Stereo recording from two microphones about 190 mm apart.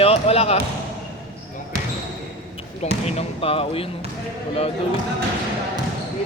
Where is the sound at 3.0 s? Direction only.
30° left (ahead or behind).